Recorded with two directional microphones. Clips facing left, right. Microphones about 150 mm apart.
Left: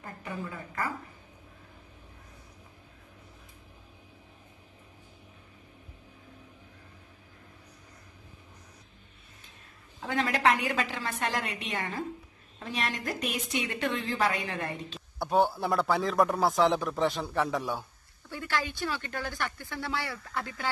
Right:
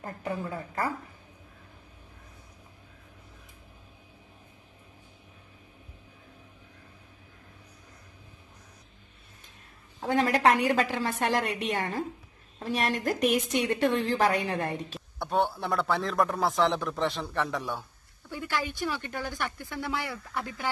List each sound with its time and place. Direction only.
0.0 s a woman's voice: 35° right (ahead or behind)
10.0 s a woman's voice: 40° right (ahead or behind)
15.0 s speech: centre (ahead or behind)
18.3 s speech: 15° right (ahead or behind)